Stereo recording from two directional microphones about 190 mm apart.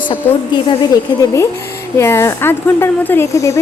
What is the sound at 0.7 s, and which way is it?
A woman's voice, 20° left (ahead or behind).